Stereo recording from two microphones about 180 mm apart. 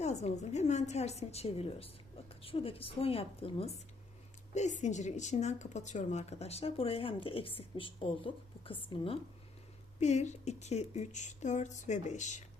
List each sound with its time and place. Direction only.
0.0 s a woman's voice: 40° left (ahead or behind)
10.0 s a woman's voice: 40° left (ahead or behind)